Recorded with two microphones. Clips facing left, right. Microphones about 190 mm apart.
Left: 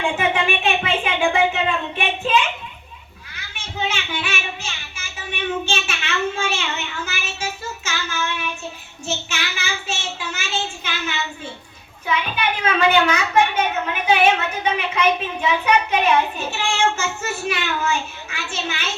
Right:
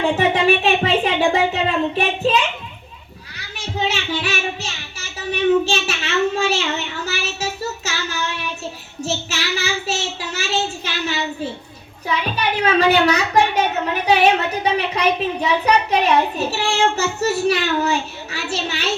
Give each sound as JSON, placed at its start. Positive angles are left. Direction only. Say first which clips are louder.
{"t": 0.2, "sound": "a child's voice", "louder": "right 5 dB", "side_deg": -35}
{"t": 3.5, "sound": "speech", "louder": "right 4 dB", "side_deg": -35}
{"t": 9.0, "sound": "child singing", "louder": "right 3 dB", "side_deg": -35}
{"t": 10.8, "sound": "a sound", "louder": "right 4 dB", "side_deg": -35}
{"t": 12.0, "sound": "a child's voice", "louder": "right 1 dB", "side_deg": -35}